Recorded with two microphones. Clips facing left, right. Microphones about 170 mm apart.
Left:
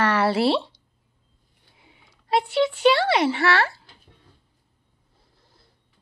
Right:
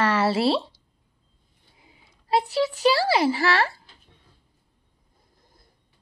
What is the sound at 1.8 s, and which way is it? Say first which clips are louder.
Speech: left 1 dB; 35° right (ahead or behind).